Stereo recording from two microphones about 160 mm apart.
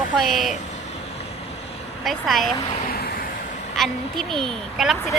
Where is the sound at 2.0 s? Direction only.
Centre (ahead or behind).